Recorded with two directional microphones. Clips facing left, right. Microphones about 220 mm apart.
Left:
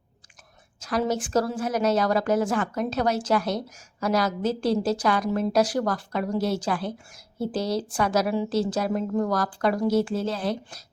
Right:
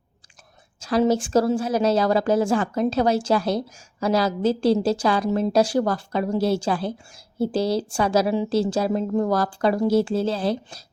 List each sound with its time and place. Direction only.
0.8 s a woman's voice: 30° right (ahead or behind)